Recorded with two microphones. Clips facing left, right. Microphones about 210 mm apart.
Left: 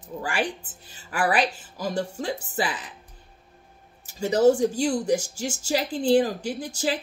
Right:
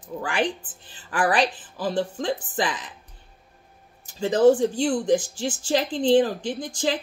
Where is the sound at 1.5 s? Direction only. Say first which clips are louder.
Right 2 dB; 40° left (ahead or behind).